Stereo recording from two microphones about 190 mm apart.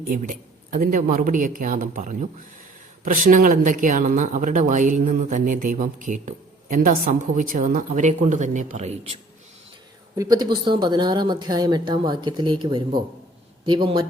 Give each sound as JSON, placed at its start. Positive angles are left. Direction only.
{"t": 0.1, "sound": "speech", "side_deg": -45}
{"t": 10.2, "sound": "a woman's voice", "side_deg": -20}